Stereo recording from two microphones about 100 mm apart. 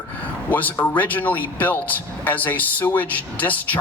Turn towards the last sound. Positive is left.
turn(degrees=15)  # may be behind; listen again after turning